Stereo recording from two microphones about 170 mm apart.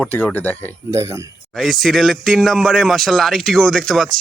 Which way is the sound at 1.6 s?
Centre (ahead or behind).